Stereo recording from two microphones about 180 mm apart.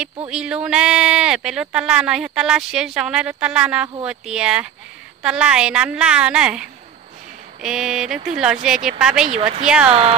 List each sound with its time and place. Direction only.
0.3 s speech: 5° right (ahead or behind)
9.3 s speech: 40° right (ahead or behind)